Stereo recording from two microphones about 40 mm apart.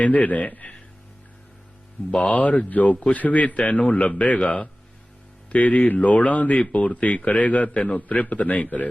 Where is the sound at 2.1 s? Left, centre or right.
Left.